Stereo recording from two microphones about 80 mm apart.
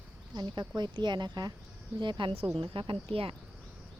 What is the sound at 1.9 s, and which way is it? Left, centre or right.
Speech, right.